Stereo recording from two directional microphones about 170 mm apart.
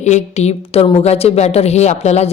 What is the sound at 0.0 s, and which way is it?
Speech, 45° left (ahead or behind).